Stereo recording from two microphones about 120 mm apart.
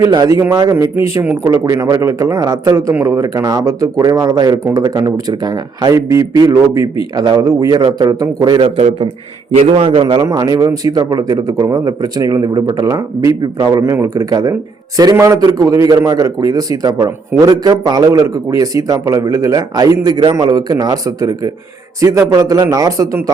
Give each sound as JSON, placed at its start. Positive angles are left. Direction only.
{"t": 0.1, "sound": "a man's voice", "side_deg": -30}
{"t": 9.6, "sound": "a man's voice", "side_deg": -55}
{"t": 10.0, "sound": "speech", "side_deg": -35}
{"t": 13.8, "sound": "a man's voice", "side_deg": -25}